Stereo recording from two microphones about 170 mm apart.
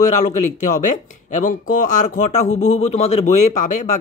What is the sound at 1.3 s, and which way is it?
Speech, 50° left (ahead or behind).